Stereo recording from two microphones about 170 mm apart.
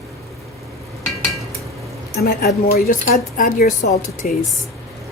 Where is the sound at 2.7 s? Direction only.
60° left (ahead or behind).